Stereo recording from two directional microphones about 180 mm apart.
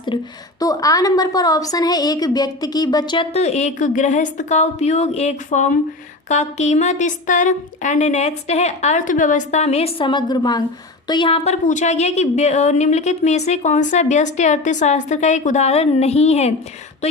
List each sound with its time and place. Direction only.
0.1 s a woman's voice: 30° left (ahead or behind)
11.6 s a woman's voice: 45° left (ahead or behind)